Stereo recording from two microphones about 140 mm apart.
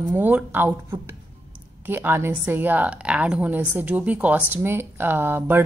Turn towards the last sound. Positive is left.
turn(degrees=-15)  # may be behind; listen again after turning